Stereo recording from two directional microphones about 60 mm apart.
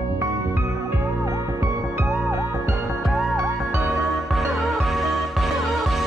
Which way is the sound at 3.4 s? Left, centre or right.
Right.